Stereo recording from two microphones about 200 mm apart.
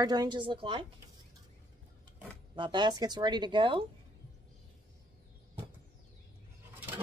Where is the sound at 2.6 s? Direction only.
25° right (ahead or behind).